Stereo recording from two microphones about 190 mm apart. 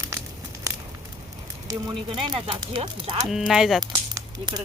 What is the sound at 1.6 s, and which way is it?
Speech, 25° right (ahead or behind).